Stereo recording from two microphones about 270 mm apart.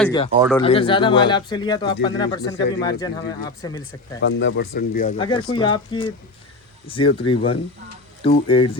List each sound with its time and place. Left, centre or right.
0.0 s speech: centre
4.2 s speech: left